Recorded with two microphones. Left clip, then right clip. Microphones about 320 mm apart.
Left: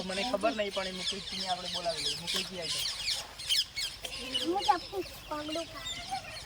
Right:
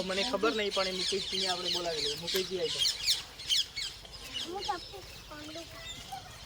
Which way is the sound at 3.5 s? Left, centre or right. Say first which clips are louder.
Even; centre.